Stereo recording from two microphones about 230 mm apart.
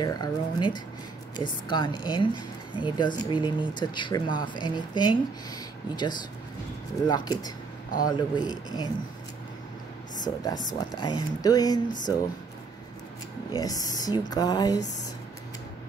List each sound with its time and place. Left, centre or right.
0.0 s a woman's voice: centre
10.5 s speech: left
11.0 s a woman's voice: centre
13.5 s a woman's voice: centre